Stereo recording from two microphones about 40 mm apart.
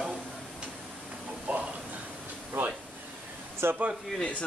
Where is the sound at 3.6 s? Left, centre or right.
Right.